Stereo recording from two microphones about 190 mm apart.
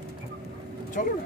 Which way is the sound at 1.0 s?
45° left (ahead or behind).